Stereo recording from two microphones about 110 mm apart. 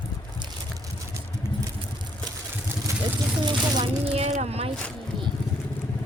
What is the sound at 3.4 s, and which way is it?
Speech, 40° right (ahead or behind).